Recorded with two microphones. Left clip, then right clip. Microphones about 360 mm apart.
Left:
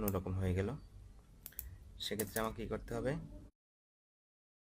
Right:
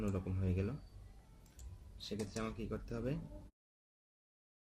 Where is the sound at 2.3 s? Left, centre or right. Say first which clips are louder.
Left 4 dB; centre.